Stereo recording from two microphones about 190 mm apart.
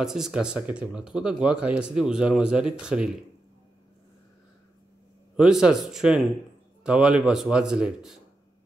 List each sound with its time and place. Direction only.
0.0 s speech: 5° right (ahead or behind)
5.3 s speech: 5° right (ahead or behind)